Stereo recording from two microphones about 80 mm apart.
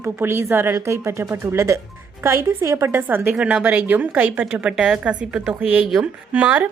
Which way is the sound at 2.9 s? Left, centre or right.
Right.